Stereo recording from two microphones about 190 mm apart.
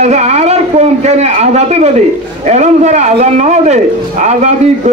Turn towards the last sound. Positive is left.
turn(degrees=-40)  # may be behind; listen again after turning